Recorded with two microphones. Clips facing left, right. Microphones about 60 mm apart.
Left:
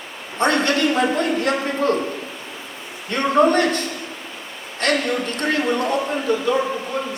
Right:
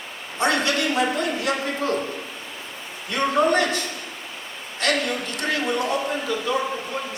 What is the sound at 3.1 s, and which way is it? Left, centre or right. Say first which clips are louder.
Speech: left 4 dB; left.